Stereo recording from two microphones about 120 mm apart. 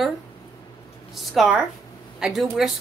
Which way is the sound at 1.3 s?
5° right (ahead or behind).